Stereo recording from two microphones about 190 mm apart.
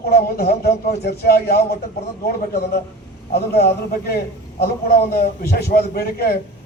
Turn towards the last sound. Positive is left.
turn(degrees=50)  # may be behind; listen again after turning